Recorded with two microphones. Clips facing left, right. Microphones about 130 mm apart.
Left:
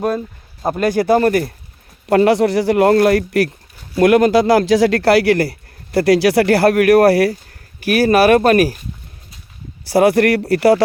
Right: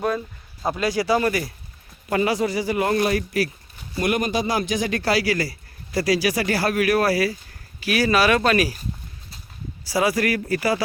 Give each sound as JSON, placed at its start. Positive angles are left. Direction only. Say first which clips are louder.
{"t": 0.6, "sound": "speech", "louder": "left 7 dB", "side_deg": 50}
{"t": 2.0, "sound": "a man's voice", "louder": "left 9 dB", "side_deg": 70}
{"t": 3.9, "sound": "a man's voice", "louder": "left 11 dB", "side_deg": 90}
{"t": 7.8, "sound": "speech", "louder": "left 7 dB", "side_deg": 45}
{"t": 9.8, "sound": "a man's voice", "louder": "left 9 dB", "side_deg": 60}